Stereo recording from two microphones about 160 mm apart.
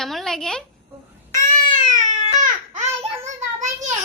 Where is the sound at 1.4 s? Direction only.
55° right (ahead or behind).